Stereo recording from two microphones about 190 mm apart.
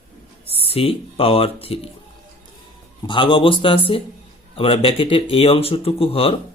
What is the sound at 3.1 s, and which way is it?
Speech, 25° left (ahead or behind).